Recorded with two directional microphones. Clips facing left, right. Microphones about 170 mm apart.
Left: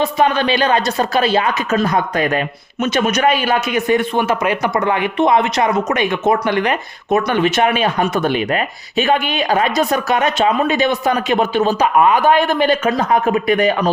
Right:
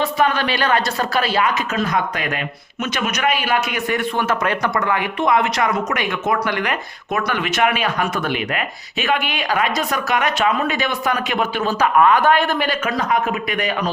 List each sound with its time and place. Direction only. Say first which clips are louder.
0.0 s a man's voice: left 3 dB; 20° left (ahead or behind)